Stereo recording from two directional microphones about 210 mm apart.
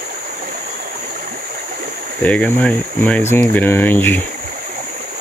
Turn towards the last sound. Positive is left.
turn(degrees=10)  # may be behind; listen again after turning